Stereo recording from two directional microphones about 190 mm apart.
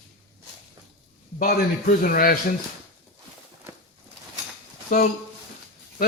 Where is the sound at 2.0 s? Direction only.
50° left (ahead or behind).